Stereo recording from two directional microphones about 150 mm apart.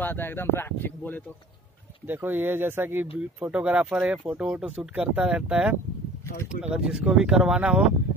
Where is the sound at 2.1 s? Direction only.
15° right (ahead or behind).